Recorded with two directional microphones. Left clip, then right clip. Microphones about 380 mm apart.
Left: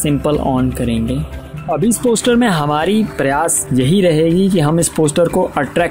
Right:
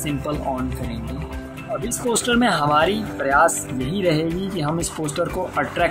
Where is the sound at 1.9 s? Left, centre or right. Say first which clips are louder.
Left 6 dB; centre.